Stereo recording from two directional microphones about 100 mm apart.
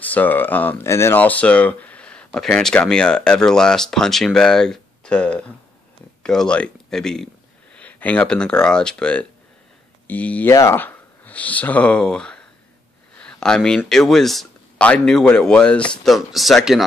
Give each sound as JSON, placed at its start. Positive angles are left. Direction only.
{"t": 0.0, "sound": "speech", "side_deg": 15}
{"t": 10.5, "sound": "speech", "side_deg": 30}
{"t": 10.8, "sound": "speech", "side_deg": 15}